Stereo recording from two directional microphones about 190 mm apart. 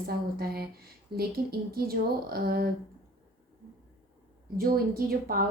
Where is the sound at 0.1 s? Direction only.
55° right (ahead or behind).